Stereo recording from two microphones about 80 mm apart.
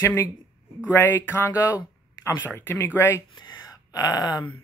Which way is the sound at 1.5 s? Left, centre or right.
Left.